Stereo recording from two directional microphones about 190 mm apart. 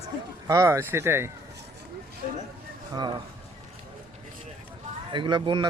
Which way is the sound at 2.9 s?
20° right (ahead or behind).